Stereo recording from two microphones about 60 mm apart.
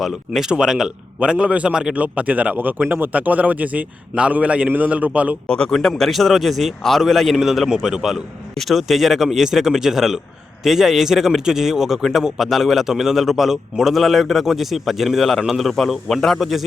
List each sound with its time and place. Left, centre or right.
0.0 s speech: centre; by 5.4 s right
5.5 s a man's voice: centre